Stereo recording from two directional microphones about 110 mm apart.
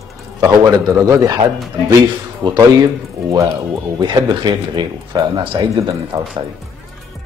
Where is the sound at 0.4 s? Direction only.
30° right (ahead or behind).